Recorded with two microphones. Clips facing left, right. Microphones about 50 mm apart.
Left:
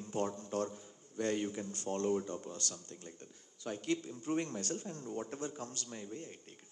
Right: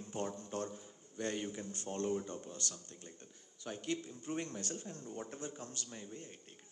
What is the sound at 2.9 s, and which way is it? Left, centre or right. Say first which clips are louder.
Speech: left 4 dB; right.